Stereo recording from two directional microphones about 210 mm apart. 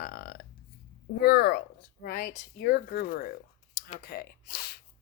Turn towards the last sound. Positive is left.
turn(degrees=50)  # may be behind; listen again after turning